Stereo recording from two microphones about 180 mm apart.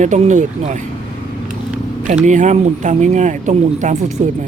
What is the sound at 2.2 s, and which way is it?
Speech, 40° right (ahead or behind).